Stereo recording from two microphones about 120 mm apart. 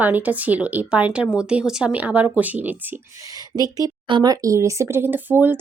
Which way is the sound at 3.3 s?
30° right (ahead or behind).